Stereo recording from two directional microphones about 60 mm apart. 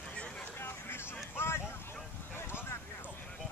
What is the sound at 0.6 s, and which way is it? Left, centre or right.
Vehicle, left.